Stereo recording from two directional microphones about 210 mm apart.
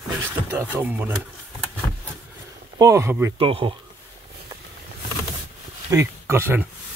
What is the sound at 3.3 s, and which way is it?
Speech, 25° right (ahead or behind).